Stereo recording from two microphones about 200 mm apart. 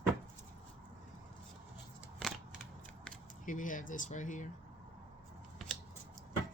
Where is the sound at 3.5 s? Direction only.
40° left (ahead or behind).